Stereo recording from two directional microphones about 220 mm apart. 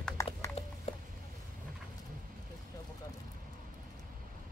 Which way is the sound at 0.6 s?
25° left (ahead or behind).